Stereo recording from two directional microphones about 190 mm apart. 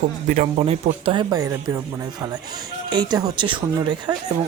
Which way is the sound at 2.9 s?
20° right (ahead or behind).